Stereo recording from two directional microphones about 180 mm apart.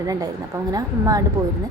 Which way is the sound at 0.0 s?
20° right (ahead or behind).